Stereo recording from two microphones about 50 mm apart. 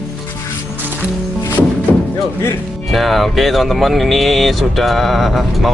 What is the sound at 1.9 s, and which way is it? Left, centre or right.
Music, left.